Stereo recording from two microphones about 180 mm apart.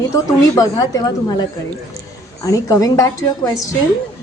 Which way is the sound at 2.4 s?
20° left (ahead or behind).